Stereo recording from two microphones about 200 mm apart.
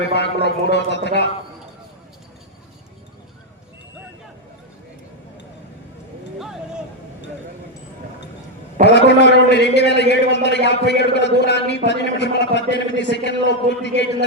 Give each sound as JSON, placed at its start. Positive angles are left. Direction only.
{"t": 0.3, "sound": "a man's voice", "side_deg": 60}
{"t": 8.8, "sound": "a man's voice", "side_deg": 60}